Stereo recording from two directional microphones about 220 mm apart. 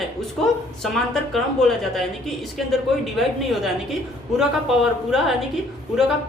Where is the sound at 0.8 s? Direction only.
Centre (ahead or behind).